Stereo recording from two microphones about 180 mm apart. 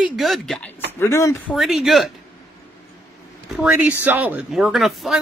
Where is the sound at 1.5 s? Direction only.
Centre (ahead or behind).